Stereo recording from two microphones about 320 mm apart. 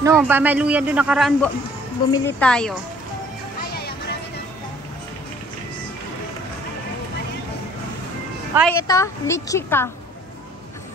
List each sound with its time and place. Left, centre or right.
0.0 s a man's voice: centre
3.7 s music: left
8.5 s a woman's voice: centre